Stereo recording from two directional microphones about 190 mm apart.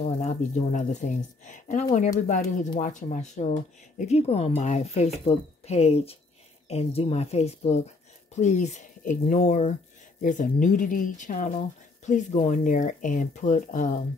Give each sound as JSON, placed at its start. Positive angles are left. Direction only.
{"t": 0.0, "sound": "speech", "side_deg": 35}